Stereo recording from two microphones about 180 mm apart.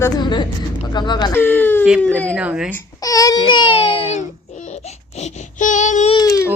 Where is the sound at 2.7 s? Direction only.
20° left (ahead or behind); by 6.1 s 40° left (ahead or behind).